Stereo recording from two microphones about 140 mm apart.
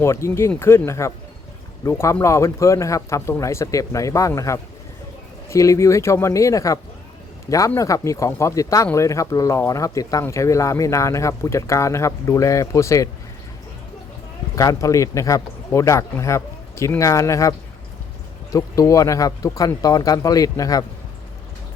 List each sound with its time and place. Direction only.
0.0 s speech: 20° left (ahead or behind)
7.8 s speech: 25° left (ahead or behind)
14.5 s speech: 25° left (ahead or behind)
18.5 s speech: 25° left (ahead or behind)